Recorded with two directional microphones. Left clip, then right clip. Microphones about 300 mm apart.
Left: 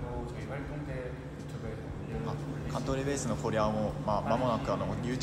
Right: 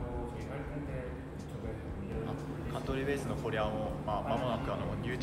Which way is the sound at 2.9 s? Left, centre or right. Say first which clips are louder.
Left 1 dB; centre.